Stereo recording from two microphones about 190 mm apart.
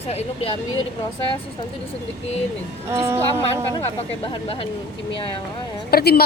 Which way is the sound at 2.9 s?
15° right (ahead or behind).